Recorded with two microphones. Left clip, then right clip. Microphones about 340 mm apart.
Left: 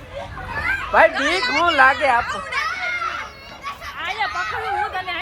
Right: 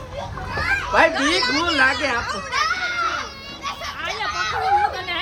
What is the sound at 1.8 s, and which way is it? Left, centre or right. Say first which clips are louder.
Speech: left 5 dB; centre.